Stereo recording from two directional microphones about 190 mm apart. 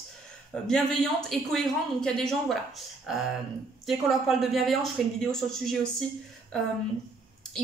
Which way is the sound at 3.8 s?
Centre (ahead or behind).